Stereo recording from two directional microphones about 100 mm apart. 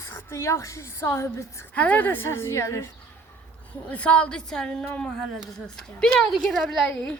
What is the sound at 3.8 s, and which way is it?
A woman's voice, 15° left (ahead or behind).